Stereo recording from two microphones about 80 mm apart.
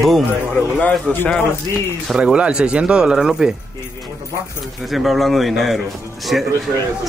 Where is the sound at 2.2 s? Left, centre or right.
Centre.